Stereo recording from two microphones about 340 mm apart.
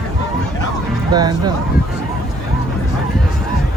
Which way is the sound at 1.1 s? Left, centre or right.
Centre.